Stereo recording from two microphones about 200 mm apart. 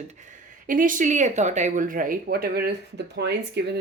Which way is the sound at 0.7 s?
40° right (ahead or behind).